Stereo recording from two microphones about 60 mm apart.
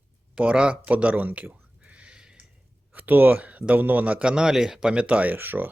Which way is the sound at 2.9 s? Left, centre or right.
Right.